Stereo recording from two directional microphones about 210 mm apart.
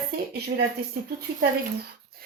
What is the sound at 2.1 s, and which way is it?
Music, 45° right (ahead or behind).